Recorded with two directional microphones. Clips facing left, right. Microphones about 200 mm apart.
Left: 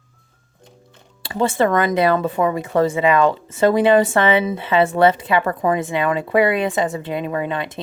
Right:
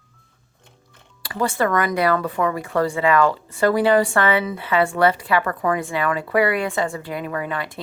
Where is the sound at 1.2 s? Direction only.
25° left (ahead or behind).